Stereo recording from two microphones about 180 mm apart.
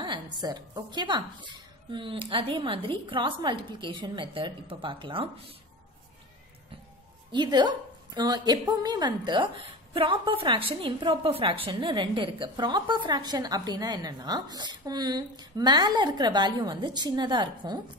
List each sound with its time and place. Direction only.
0.0 s a woman's voice: 25° right (ahead or behind)
7.3 s a woman's voice: 25° right (ahead or behind)